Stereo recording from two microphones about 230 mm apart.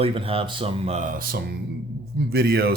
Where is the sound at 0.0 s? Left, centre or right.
Right.